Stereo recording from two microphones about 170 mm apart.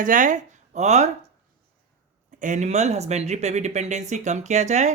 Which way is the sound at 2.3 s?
45° right (ahead or behind).